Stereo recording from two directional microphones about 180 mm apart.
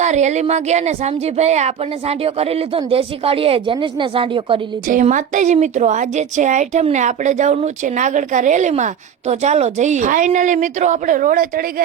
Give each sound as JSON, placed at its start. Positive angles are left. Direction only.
{"t": 0.0, "sound": "speech", "side_deg": -40}
{"t": 4.9, "sound": "a woman's voice", "side_deg": -45}